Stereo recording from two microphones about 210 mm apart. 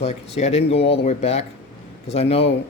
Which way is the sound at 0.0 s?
30° left (ahead or behind).